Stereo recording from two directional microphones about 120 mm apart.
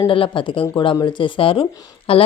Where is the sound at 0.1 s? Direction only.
45° left (ahead or behind).